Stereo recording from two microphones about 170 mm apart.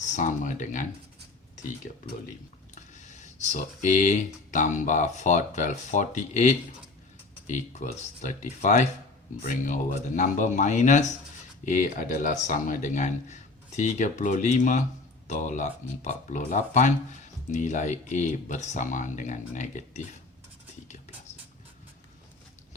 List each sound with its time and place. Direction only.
0.0 s speech: 45° left (ahead or behind)
2.7 s speech: 45° left (ahead or behind)